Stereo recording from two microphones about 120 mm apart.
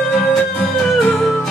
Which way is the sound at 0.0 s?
Centre (ahead or behind).